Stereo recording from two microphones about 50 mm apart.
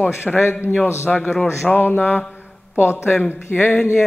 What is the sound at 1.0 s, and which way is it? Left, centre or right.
Mantra, left.